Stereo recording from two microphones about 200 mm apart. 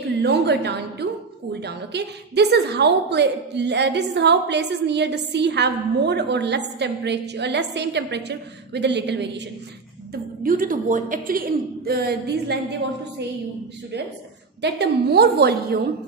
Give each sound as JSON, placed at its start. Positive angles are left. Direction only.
{"t": 0.2, "sound": "a woman's voice", "side_deg": -55}
{"t": 10.4, "sound": "a woman's voice", "side_deg": -45}
{"t": 14.6, "sound": "a woman's voice", "side_deg": -55}